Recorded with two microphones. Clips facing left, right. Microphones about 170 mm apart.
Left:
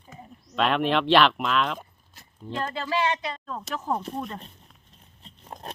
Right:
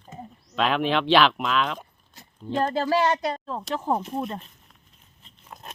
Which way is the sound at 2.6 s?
40° right (ahead or behind).